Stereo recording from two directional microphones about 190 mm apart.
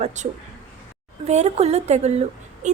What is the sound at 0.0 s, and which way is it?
Speech, 40° right (ahead or behind).